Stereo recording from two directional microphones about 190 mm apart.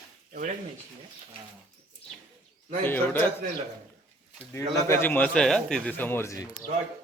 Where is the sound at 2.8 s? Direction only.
10° left (ahead or behind).